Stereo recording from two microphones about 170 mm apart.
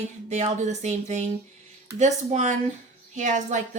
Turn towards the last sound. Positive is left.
turn(degrees=-45)  # may be behind; listen again after turning